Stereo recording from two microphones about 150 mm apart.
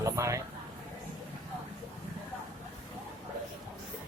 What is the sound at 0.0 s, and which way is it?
Speech, 20° right (ahead or behind).